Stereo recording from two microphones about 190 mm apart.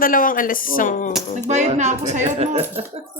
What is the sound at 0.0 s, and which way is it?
Speech, 45° left (ahead or behind).